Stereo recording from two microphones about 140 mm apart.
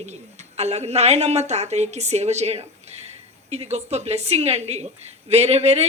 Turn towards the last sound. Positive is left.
turn(degrees=-50)  # may be behind; listen again after turning